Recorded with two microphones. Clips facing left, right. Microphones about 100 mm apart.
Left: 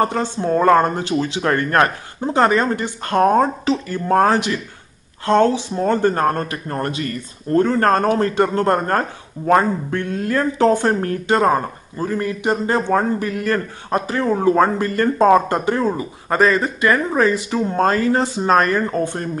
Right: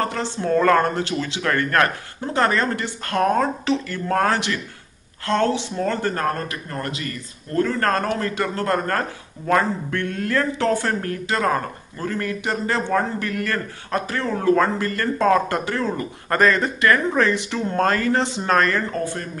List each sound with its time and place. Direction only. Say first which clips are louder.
0.0 s speech: left 5 dB; 20° left (ahead or behind)
6.1 s speech: left 5 dB; 30° left (ahead or behind)
11.0 s speech: left 6 dB; 30° left (ahead or behind)